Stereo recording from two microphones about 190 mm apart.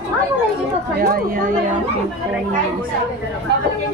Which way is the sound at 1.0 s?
50° right (ahead or behind).